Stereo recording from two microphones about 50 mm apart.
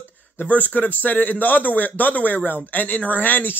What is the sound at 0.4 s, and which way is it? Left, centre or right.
A man's voice, left.